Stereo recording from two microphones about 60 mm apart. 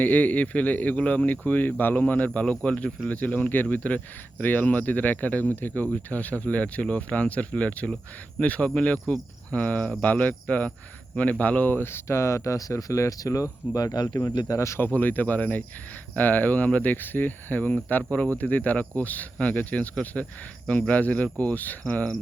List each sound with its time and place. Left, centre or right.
0.0 s speech: left
14.9 s speech: left